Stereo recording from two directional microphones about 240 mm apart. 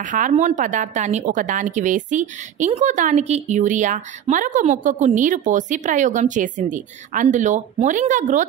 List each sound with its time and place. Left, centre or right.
0.0 s a woman's voice: right